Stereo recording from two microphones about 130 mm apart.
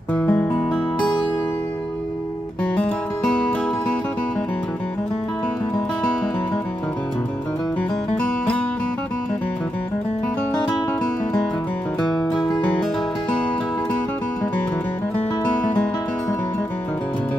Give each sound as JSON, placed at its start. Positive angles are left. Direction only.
{"t": 0.1, "sound": "music", "side_deg": 10}
{"t": 2.6, "sound": "music", "side_deg": 5}